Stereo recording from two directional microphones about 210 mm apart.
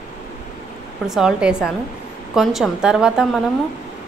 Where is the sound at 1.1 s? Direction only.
Centre (ahead or behind).